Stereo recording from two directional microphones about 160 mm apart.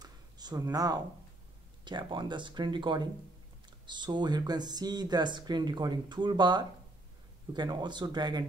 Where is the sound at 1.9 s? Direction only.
30° right (ahead or behind).